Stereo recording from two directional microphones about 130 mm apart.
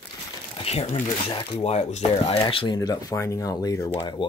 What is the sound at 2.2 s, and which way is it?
Speech, 45° left (ahead or behind).